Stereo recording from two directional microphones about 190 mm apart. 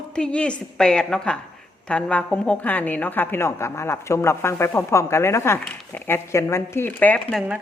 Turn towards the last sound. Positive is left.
turn(degrees=0)  # may be behind; listen again after turning